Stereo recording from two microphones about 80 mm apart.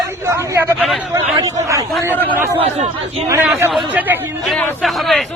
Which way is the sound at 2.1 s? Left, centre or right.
Left.